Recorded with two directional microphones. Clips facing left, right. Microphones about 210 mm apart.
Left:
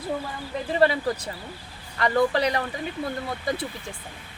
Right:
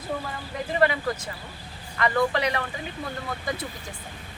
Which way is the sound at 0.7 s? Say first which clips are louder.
Left 2 dB; 35° left (ahead or behind).